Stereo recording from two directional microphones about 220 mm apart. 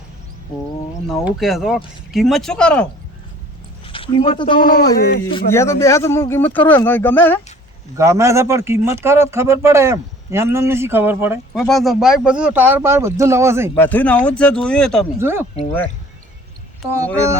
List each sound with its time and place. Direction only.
1.0 s speech: centre (ahead or behind)
3.8 s speech: 25° left (ahead or behind)
4.9 s speech: 45° left (ahead or behind)
5.2 s a man's voice: 20° left (ahead or behind)
7.9 s speech: 15° right (ahead or behind)
11.6 s speech: centre (ahead or behind)
13.7 s speech: 10° left (ahead or behind)
15.2 s speech: 10° right (ahead or behind)